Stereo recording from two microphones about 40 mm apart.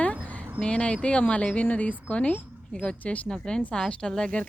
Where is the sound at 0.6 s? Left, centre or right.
Left.